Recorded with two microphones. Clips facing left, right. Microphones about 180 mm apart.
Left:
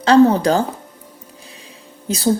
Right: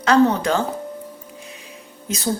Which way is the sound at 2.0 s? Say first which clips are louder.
Left 6 dB; 35° left (ahead or behind).